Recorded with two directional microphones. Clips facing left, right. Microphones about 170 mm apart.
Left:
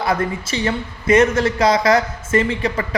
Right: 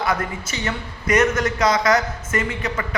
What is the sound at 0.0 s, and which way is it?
A man's voice, 30° left (ahead or behind).